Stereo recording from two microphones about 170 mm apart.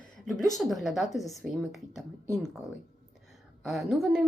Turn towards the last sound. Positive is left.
turn(degrees=-5)  # may be behind; listen again after turning